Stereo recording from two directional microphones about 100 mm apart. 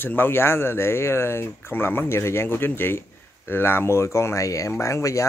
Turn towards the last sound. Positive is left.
turn(degrees=30)  # may be behind; listen again after turning